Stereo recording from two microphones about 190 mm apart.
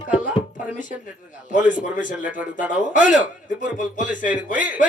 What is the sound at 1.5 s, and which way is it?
Speech, 45° left (ahead or behind).